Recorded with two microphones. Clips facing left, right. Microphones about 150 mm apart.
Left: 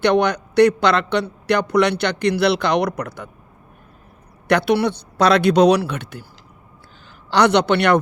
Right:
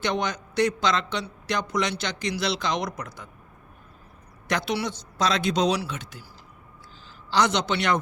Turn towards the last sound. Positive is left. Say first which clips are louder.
# left 9 dB
turn(degrees=65)  # may be behind; listen again after turning